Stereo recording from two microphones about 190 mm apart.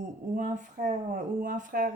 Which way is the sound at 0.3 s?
40° right (ahead or behind).